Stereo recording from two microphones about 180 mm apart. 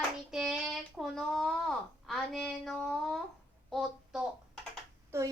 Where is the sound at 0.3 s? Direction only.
5° right (ahead or behind).